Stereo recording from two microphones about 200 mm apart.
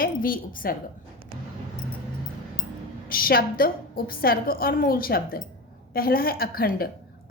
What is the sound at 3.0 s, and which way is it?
A woman's voice, 45° left (ahead or behind).